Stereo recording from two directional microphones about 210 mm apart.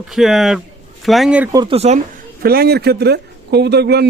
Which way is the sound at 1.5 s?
25° right (ahead or behind).